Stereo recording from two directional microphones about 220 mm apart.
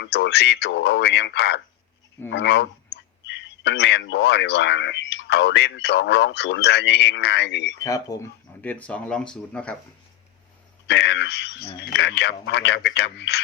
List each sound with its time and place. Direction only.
0.0 s speech: 50° left (ahead or behind)
7.8 s speech: 15° left (ahead or behind)
10.8 s speech: 50° left (ahead or behind)